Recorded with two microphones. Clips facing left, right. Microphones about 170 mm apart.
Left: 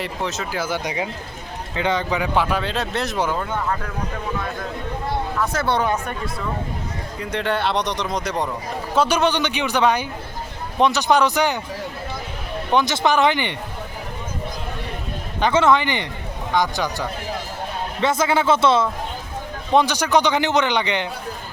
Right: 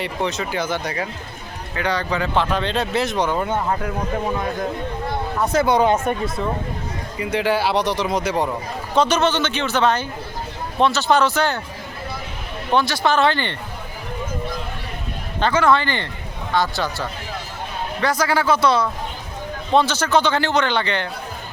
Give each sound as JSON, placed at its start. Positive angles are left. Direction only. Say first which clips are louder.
{"t": 0.0, "sound": "speech", "louder": "right 2 dB", "side_deg": 0}
{"t": 3.3, "sound": "speech", "louder": "right 3 dB", "side_deg": -20}
{"t": 5.4, "sound": "speech", "louder": "right 6 dB", "side_deg": -15}
{"t": 7.2, "sound": "speech", "louder": "right 3 dB", "side_deg": -5}
{"t": 9.0, "sound": "speech", "louder": "right 1 dB", "side_deg": 10}
{"t": 12.7, "sound": "speech", "louder": "even", "side_deg": 20}
{"t": 15.5, "sound": "speech", "louder": "left 1 dB", "side_deg": 20}